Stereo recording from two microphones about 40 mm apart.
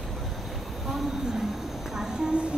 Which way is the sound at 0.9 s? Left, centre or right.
Centre.